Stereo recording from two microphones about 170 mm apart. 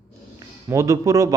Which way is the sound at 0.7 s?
20° right (ahead or behind).